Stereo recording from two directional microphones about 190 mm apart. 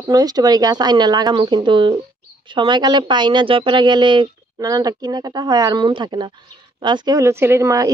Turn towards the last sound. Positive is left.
turn(degrees=-15)  # may be behind; listen again after turning